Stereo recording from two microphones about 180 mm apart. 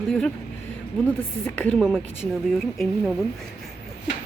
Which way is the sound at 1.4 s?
10° left (ahead or behind).